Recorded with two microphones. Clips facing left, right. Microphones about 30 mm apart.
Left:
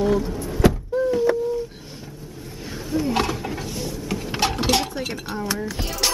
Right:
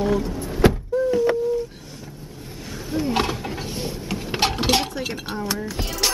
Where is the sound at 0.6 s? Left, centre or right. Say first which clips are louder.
Right 1 dB; right.